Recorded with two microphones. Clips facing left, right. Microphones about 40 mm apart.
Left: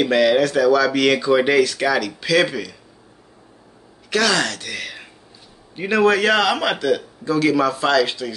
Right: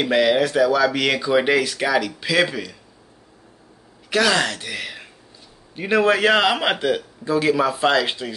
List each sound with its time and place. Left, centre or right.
0.0 s speech: centre
4.1 s speech: centre